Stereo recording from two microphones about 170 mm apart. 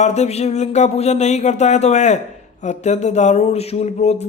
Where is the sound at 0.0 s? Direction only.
40° left (ahead or behind).